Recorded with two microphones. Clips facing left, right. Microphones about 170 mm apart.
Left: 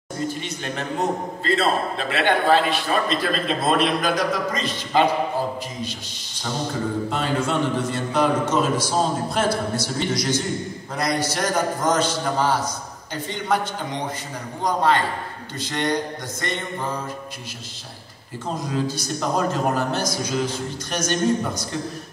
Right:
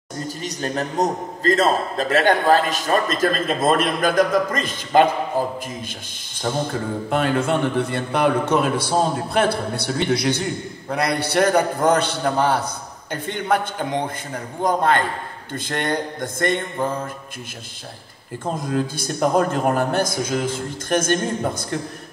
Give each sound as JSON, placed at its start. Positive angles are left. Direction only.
{"t": 0.3, "sound": "a man's voice", "side_deg": -40}
{"t": 6.4, "sound": "a man's voice", "side_deg": -55}
{"t": 18.4, "sound": "a man's voice", "side_deg": -55}